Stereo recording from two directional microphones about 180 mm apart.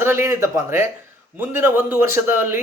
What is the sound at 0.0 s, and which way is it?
A man's voice, 15° right (ahead or behind).